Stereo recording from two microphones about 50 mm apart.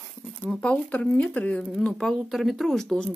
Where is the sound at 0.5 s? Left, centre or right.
Left.